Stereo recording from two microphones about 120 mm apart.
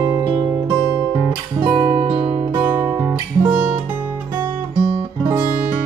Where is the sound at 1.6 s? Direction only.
35° right (ahead or behind).